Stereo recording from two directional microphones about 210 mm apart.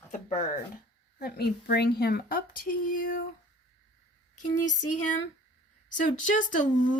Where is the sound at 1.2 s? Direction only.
50° left (ahead or behind).